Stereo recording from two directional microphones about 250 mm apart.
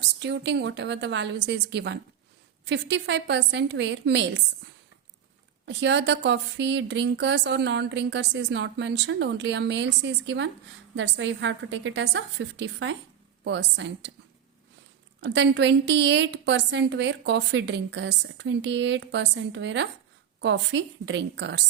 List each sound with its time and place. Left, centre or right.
0.2 s speech: right
5.6 s speech: right
15.2 s speech: right